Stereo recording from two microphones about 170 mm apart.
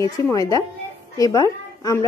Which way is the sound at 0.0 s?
20° left (ahead or behind).